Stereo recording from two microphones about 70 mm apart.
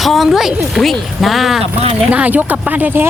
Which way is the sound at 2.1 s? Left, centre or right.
Right.